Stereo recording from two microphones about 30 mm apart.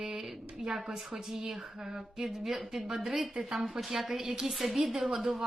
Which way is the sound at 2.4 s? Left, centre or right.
Centre.